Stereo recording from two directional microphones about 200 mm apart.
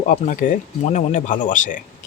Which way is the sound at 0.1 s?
40° left (ahead or behind).